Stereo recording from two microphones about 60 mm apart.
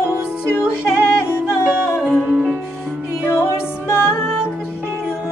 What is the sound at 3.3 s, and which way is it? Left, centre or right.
Music, left.